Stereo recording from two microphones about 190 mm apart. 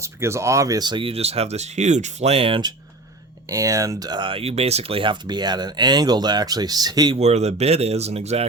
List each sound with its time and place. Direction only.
0.0 s speech: 15° right (ahead or behind)
7.2 s speech: 35° right (ahead or behind)